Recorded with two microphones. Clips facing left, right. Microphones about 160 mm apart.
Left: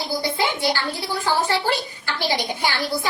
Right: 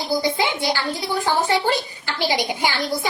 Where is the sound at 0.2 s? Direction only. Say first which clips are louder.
Right 1 dB; 15° right (ahead or behind).